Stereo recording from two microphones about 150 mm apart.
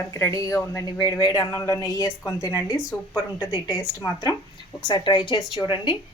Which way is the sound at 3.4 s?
30° left (ahead or behind).